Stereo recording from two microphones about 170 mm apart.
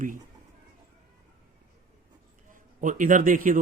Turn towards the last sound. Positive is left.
turn(degrees=-50)  # may be behind; listen again after turning